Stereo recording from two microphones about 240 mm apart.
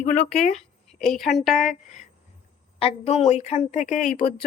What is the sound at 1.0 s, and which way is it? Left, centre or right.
Speech, centre.